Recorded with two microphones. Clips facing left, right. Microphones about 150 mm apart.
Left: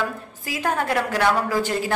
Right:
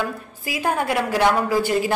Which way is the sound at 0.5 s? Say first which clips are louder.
Right 1 dB; 10° right (ahead or behind).